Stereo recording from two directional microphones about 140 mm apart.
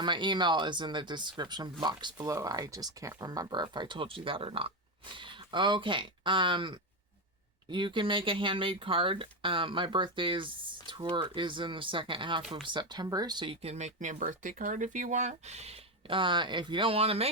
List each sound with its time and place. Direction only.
0.0 s speech: 35° right (ahead or behind)